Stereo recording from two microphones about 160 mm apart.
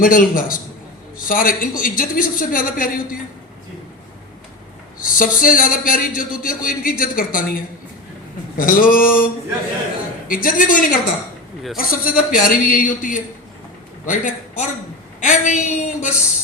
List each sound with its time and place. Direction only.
0.0 s a man's voice: 60° left (ahead or behind)
5.0 s a man's voice: 60° left (ahead or behind)
10.2 s a man's voice: 60° left (ahead or behind)
15.2 s a sound: 50° left (ahead or behind)